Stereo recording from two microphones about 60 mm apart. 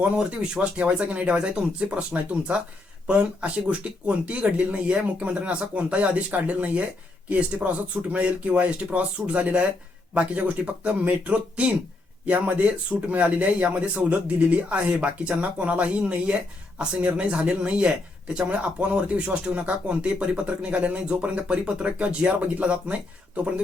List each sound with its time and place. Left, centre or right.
0.0 s speech: centre